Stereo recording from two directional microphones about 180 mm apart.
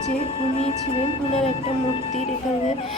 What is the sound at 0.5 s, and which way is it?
Speech, 35° left (ahead or behind).